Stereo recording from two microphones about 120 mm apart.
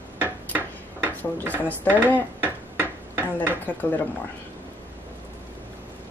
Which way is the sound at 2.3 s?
15° right (ahead or behind).